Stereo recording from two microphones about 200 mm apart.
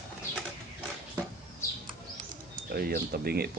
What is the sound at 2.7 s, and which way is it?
Speech, 50° right (ahead or behind).